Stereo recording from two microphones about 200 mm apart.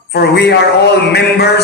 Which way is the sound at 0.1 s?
55° left (ahead or behind).